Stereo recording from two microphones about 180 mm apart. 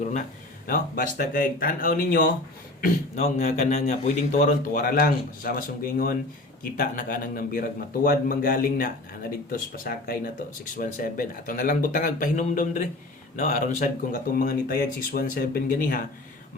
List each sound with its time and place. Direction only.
0.0 s speech: 45° left (ahead or behind)
4.0 s speech: 40° left (ahead or behind)